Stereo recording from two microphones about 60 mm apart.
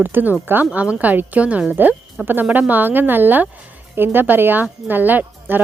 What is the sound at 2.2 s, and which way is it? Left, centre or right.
Speech, right.